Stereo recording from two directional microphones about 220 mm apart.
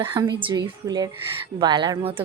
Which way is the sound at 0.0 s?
20° right (ahead or behind).